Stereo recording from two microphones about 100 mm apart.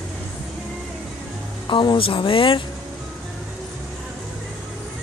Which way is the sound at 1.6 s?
55° left (ahead or behind).